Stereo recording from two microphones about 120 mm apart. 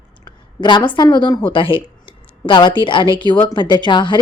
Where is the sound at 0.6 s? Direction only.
40° left (ahead or behind).